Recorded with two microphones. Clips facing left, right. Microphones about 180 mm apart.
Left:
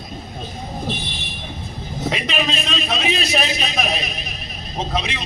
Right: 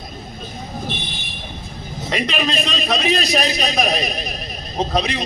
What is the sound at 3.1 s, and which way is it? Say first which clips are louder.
A man's voice: right 3 dB; 40° right (ahead or behind).